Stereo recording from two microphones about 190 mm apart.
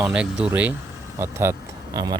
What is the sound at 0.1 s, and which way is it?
Speech, 5° right (ahead or behind).